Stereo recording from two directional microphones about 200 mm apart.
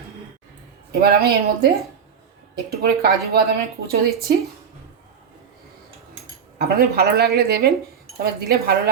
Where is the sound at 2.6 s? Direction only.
50° right (ahead or behind).